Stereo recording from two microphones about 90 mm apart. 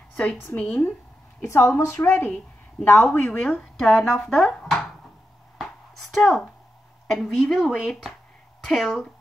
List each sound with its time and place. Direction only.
0.1 s a woman's voice: 15° left (ahead or behind)
1.4 s a woman's voice: 30° left (ahead or behind); by 4.8 s 5° left (ahead or behind)
6.1 s speech: 5° left (ahead or behind)